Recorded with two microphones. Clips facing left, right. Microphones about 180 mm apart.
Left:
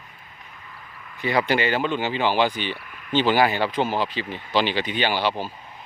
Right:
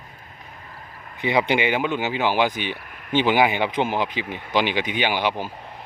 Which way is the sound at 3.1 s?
15° right (ahead or behind).